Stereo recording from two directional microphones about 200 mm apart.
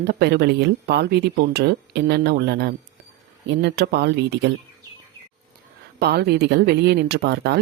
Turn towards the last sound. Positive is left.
turn(degrees=-55)  # may be behind; listen again after turning